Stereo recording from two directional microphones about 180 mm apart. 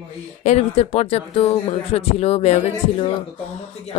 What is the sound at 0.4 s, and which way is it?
Speech, 40° left (ahead or behind).